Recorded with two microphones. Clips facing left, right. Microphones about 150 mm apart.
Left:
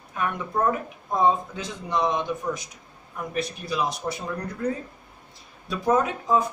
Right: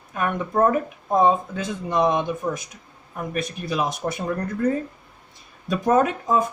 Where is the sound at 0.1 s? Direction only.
50° right (ahead or behind).